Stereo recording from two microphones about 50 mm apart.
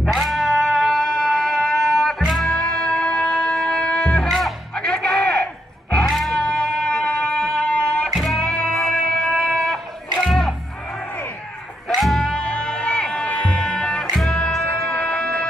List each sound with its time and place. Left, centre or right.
0.2 s music: centre
0.5 s music: centre
4.3 s music: centre
4.7 s music: centre
5.2 s a sound: left
6.0 s music: centre
6.3 s music: centre
8.1 s music: centre
8.5 s music: centre
11.9 s music: centre
12.3 s music: centre
14.1 s music: centre
14.9 s music: left